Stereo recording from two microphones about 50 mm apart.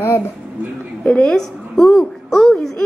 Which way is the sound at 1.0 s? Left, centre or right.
Centre.